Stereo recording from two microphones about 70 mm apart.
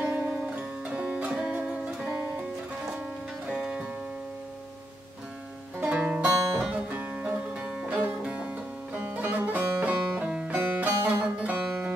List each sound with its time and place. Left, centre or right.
0.0 s music: centre
3.4 s music: centre
5.8 s music: centre